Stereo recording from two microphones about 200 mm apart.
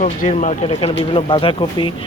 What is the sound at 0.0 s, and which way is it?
Speech, 35° left (ahead or behind).